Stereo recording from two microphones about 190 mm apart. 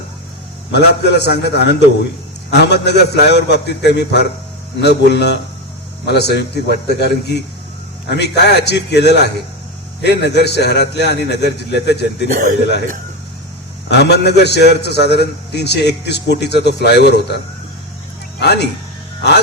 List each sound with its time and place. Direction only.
0.7 s a man's voice: 60° left (ahead or behind)
13.8 s a man's voice: 60° left (ahead or behind)